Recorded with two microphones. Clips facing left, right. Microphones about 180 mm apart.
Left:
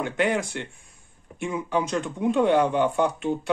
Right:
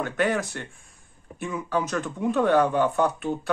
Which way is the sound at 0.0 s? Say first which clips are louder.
Left 1 dB; 20° left (ahead or behind).